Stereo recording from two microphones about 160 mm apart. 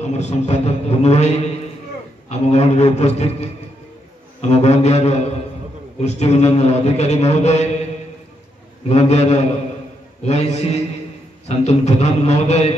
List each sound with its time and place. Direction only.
0.0 s a man's voice: 45° left (ahead or behind)
8.8 s a man's voice: 45° left (ahead or behind)